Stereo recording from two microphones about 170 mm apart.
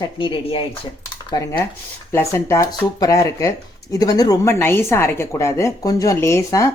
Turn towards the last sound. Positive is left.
turn(degrees=20)  # may be behind; listen again after turning